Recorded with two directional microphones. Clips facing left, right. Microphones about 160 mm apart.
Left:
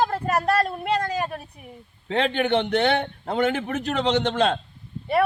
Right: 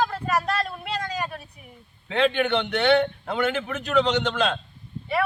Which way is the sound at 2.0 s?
40° left (ahead or behind).